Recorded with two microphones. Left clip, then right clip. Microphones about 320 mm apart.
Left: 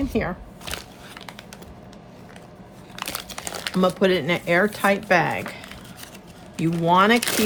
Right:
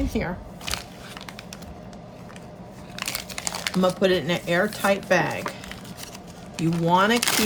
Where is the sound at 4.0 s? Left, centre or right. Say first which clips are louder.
Left 1 dB; centre.